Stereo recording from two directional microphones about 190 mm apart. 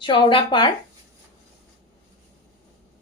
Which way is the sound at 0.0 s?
25° left (ahead or behind).